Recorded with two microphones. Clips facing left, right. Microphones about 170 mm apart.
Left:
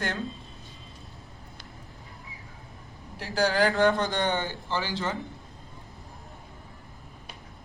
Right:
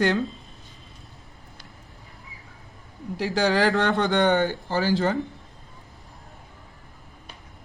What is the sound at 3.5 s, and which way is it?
Speech, 80° right.